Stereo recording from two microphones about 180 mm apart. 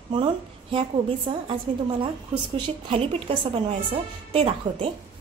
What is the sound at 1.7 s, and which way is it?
A woman's voice, 35° right (ahead or behind).